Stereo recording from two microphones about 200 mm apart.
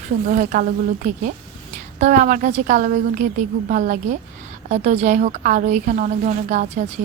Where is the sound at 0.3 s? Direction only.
45° right (ahead or behind).